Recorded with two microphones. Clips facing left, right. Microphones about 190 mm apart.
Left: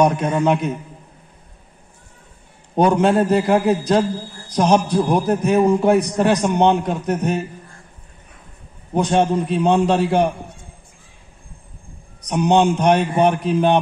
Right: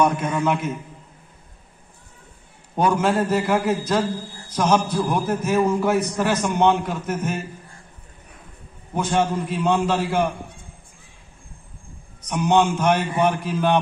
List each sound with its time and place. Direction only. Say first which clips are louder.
0.0 s a man's voice: left 4 dB; 35° left (ahead or behind)
2.7 s a man's voice: left 5 dB; 30° left (ahead or behind)
8.9 s a man's voice: left 5 dB; 30° left (ahead or behind)
12.2 s a man's voice: left 3 dB; 35° left (ahead or behind)